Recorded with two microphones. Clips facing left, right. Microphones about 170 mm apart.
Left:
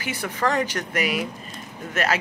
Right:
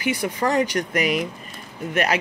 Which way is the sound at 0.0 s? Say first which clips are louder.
Right 3 dB; 15° right (ahead or behind).